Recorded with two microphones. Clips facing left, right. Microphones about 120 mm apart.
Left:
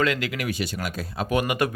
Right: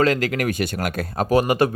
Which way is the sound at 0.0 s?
40° right (ahead or behind).